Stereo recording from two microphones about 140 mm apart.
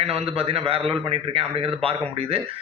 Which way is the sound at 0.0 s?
45° right (ahead or behind).